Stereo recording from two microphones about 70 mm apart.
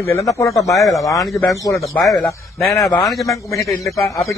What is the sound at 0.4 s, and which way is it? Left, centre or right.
Speech, left.